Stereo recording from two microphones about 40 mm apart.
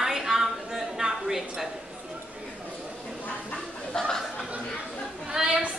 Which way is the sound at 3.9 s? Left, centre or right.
Left.